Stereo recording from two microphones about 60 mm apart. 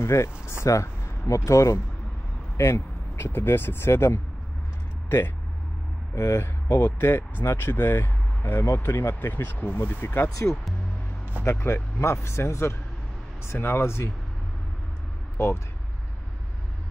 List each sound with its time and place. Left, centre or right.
0.0 s speech: left
2.5 s speech: left
6.1 s speech: left
15.3 s speech: left